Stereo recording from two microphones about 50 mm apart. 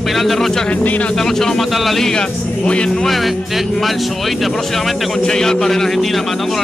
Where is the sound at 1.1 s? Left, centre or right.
Centre.